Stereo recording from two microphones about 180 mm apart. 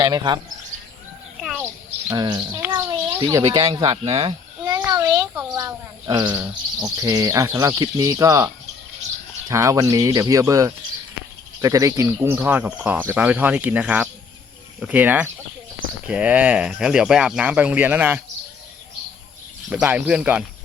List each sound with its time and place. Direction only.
0.0 s speech: 20° right (ahead or behind)
1.4 s a sound: centre (ahead or behind)
2.0 s a child's voice: 25° right (ahead or behind)
19.7 s speech: 10° right (ahead or behind)